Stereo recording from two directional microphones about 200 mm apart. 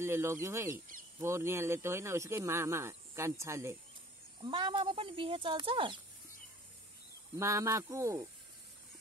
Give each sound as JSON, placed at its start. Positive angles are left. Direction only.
{"t": 0.0, "sound": "speech", "side_deg": -15}
{"t": 7.3, "sound": "speech", "side_deg": -15}